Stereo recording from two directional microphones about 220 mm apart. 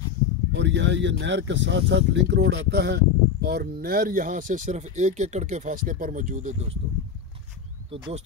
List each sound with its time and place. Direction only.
0.5 s speech: 55° right (ahead or behind); by 6.8 s 30° right (ahead or behind)